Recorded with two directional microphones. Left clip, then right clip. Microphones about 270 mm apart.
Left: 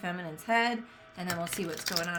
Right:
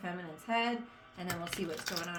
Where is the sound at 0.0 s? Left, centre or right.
Left.